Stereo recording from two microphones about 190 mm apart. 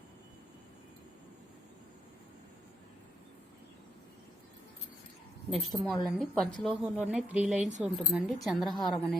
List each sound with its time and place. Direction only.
5.5 s a woman's voice: centre (ahead or behind)